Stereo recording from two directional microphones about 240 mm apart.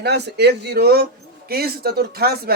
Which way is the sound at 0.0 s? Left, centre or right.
Right.